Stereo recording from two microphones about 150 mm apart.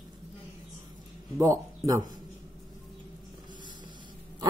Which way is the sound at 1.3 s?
20° right (ahead or behind).